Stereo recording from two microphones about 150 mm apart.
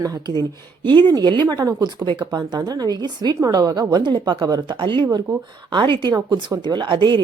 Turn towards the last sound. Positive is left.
turn(degrees=-30)  # may be behind; listen again after turning